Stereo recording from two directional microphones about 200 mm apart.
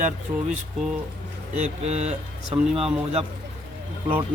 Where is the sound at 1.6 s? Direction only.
35° right (ahead or behind).